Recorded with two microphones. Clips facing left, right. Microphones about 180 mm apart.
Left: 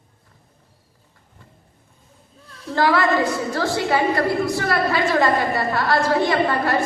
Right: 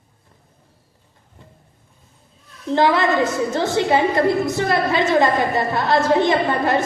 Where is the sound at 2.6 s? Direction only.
20° right (ahead or behind).